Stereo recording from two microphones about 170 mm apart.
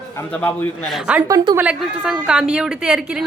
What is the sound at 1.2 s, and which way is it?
Speech, 20° right (ahead or behind).